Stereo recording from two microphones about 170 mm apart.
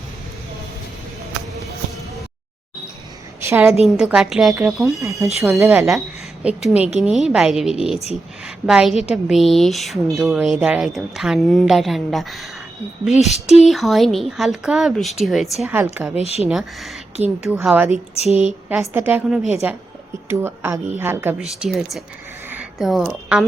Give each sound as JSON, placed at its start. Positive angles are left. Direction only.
{"t": 3.4, "sound": "a woman's voice", "side_deg": -15}
{"t": 3.8, "sound": "a woman's voice", "side_deg": -5}
{"t": 4.9, "sound": "a woman's voice", "side_deg": -20}
{"t": 6.4, "sound": "a woman's voice", "side_deg": -5}
{"t": 13.3, "sound": "speech", "side_deg": 40}
{"t": 13.7, "sound": "a woman's voice", "side_deg": 0}
{"t": 15.7, "sound": "a woman's voice", "side_deg": -10}
{"t": 16.1, "sound": "speech", "side_deg": 35}
{"t": 16.5, "sound": "a woman's voice", "side_deg": 0}
{"t": 18.1, "sound": "speech", "side_deg": 35}
{"t": 18.7, "sound": "a woman's voice", "side_deg": -10}
{"t": 21.4, "sound": "a woman's voice", "side_deg": 0}
{"t": 22.4, "sound": "a sound", "side_deg": -5}